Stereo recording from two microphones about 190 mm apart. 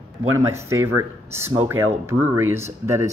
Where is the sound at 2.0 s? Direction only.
10° right (ahead or behind).